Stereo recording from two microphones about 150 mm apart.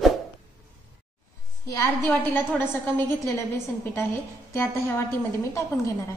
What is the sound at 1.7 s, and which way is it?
A woman's voice, 20° left (ahead or behind).